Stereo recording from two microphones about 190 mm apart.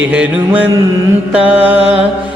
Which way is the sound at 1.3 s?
5° right (ahead or behind).